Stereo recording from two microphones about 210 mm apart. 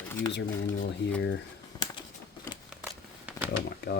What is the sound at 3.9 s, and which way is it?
Speech, 55° left (ahead or behind).